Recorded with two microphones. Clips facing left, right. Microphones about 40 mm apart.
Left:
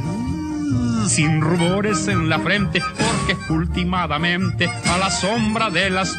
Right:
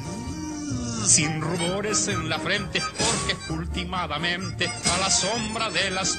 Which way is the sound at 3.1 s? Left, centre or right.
Left.